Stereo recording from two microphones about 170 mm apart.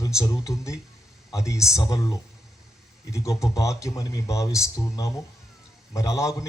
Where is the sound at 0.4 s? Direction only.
20° left (ahead or behind).